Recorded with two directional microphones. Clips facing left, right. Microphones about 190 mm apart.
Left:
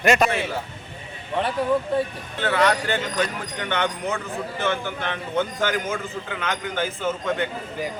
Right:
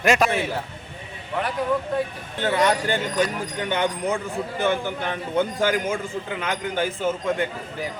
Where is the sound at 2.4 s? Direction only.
15° right (ahead or behind).